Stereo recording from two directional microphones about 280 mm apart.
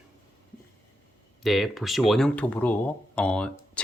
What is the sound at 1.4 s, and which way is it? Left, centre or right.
Speech, centre.